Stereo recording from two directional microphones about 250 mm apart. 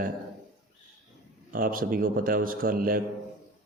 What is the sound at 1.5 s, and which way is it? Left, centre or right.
A man's voice, right.